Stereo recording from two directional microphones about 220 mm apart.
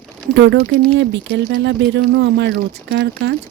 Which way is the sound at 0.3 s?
55° right (ahead or behind).